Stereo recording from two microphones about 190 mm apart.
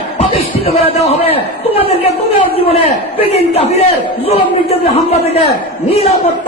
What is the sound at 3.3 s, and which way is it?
Speech, 35° left (ahead or behind).